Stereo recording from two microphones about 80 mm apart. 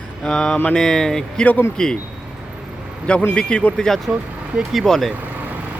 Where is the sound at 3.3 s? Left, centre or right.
Centre.